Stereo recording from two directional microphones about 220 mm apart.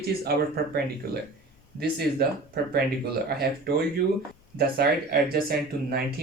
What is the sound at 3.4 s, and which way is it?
Speech, 45° right (ahead or behind).